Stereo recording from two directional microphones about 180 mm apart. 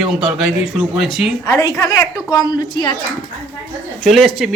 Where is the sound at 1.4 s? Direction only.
20° left (ahead or behind).